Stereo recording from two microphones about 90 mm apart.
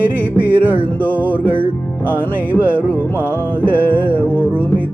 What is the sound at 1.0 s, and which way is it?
Music, 20° left (ahead or behind).